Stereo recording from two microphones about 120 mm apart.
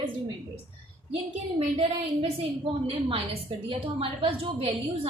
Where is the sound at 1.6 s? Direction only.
45° right (ahead or behind).